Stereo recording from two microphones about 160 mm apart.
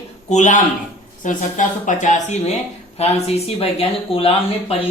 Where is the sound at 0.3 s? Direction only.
50° left (ahead or behind).